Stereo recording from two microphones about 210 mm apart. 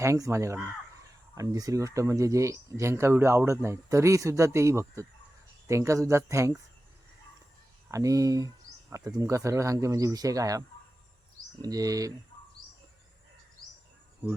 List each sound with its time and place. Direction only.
0.0 s speech: 15° right (ahead or behind)
7.9 s speech: 15° right (ahead or behind)
11.6 s speech: 15° right (ahead or behind)